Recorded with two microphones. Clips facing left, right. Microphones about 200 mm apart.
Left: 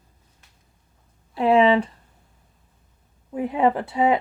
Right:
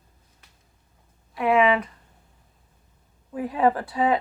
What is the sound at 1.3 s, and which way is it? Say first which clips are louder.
Speech: left 3 dB; 30° left (ahead or behind).